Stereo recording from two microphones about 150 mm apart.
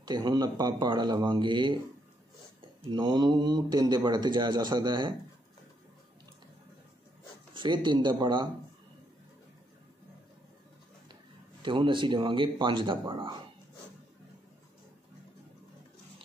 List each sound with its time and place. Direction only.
0.0 s a man's voice: 30° right (ahead or behind)
2.9 s a man's voice: 30° right (ahead or behind)
7.5 s speech: 30° right (ahead or behind)
11.6 s speech: 35° right (ahead or behind)